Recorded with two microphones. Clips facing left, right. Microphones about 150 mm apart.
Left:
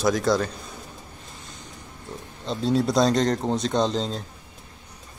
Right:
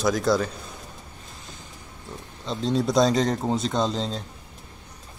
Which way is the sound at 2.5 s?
5° left (ahead or behind).